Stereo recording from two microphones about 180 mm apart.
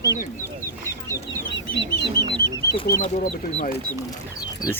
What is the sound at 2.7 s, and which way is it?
Speech, 60° left (ahead or behind).